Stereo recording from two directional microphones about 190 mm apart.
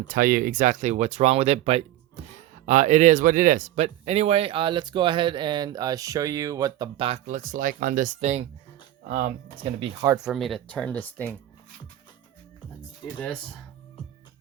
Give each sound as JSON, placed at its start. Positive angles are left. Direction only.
{"t": 0.1, "sound": "speech", "side_deg": -50}
{"t": 9.8, "sound": "speech", "side_deg": -20}
{"t": 10.2, "sound": "speech", "side_deg": 0}